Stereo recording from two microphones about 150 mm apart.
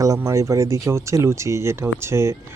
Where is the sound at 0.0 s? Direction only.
20° right (ahead or behind).